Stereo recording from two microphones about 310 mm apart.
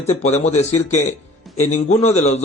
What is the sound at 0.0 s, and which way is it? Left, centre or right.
Speech, left.